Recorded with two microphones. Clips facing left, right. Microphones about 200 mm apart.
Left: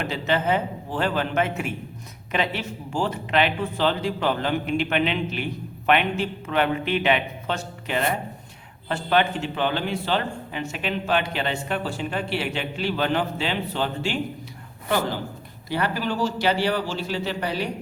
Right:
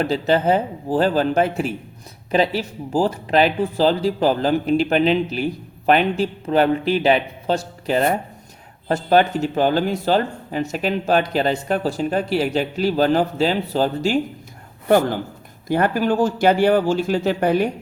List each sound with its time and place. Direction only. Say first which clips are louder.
0.0 s speech: right 6 dB; 35° right (ahead or behind)
14.8 s speech: right 8 dB; 50° right (ahead or behind)